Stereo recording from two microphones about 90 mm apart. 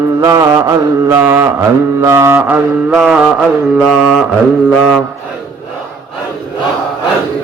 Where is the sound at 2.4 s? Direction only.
20° right (ahead or behind).